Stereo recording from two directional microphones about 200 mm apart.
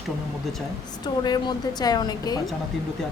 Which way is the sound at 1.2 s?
20° left (ahead or behind).